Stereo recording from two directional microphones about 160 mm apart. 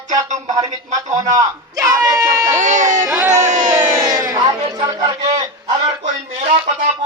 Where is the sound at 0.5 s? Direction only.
25° right (ahead or behind).